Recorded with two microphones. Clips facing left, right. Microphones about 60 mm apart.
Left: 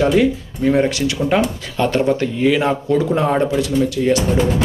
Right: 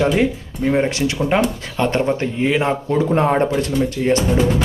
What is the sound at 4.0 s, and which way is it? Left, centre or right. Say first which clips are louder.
Speech: left 2 dB; centre.